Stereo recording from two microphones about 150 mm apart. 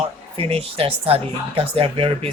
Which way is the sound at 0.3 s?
40° right (ahead or behind).